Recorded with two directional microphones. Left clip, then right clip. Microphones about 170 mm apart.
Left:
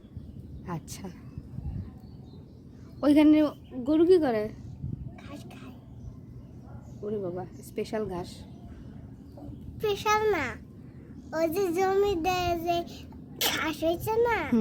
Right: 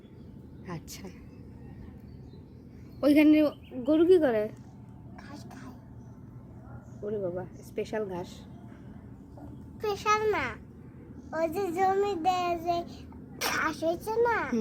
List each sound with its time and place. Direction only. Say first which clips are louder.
0.6 s a woman's voice: left 3 dB; 20° left (ahead or behind)
3.0 s a woman's voice: left 1 dB; 10° left (ahead or behind)
7.0 s a woman's voice: even; 5° left (ahead or behind)
9.8 s a child's voice: left 1 dB; 55° left (ahead or behind)
10.3 s child singing: left 1 dB; 40° left (ahead or behind)
13.4 s a child's voice: left 1 dB; 20° left (ahead or behind)